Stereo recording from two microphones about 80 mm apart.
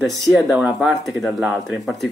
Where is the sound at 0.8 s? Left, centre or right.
Centre.